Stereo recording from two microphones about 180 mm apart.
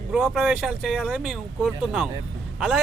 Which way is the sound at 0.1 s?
Centre (ahead or behind).